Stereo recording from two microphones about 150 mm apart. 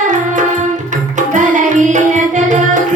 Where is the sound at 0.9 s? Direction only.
55° right (ahead or behind).